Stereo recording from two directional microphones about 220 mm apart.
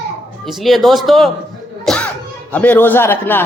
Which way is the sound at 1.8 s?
Centre (ahead or behind).